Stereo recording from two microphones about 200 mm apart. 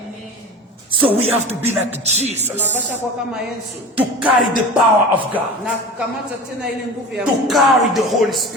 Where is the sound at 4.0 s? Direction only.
5° right (ahead or behind).